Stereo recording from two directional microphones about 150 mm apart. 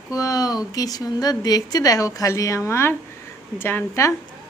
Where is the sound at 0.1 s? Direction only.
25° left (ahead or behind).